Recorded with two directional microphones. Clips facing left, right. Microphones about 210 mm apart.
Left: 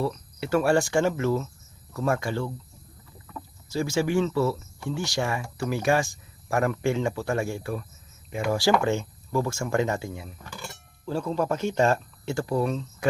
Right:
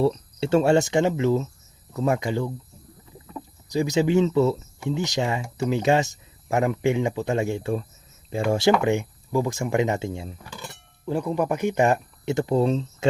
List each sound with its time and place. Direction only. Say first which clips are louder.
0.0 s speech: right 7 dB; 25° right (ahead or behind)